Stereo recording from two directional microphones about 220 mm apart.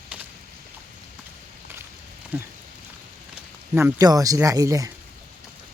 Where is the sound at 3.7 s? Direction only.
15° right (ahead or behind).